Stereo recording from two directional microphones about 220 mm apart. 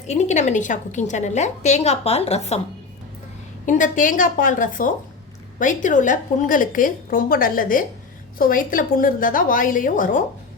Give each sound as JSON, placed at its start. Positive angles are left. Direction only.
{"t": 0.1, "sound": "a woman's voice", "side_deg": 30}
{"t": 3.7, "sound": "a woman's voice", "side_deg": 35}